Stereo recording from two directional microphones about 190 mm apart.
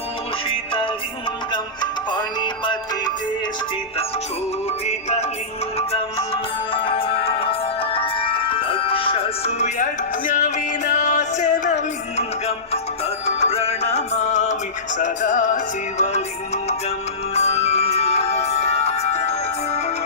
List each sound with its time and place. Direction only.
0.4 s music: 30° left (ahead or behind)
4.9 s music: 35° left (ahead or behind)
17.3 s music: 35° left (ahead or behind)